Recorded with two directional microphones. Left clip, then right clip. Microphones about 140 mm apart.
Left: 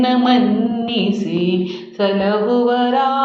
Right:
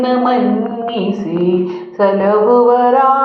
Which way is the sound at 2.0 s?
15° left (ahead or behind).